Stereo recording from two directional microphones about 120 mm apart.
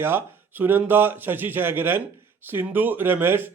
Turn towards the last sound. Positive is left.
turn(degrees=-20)  # may be behind; listen again after turning